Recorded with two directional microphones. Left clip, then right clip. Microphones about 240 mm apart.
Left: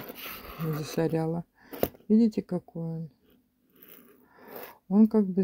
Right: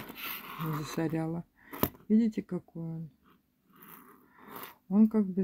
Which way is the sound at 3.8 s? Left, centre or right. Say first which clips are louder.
Right 2 dB; centre.